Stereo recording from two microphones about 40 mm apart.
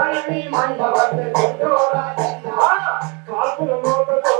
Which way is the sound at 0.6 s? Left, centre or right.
Centre.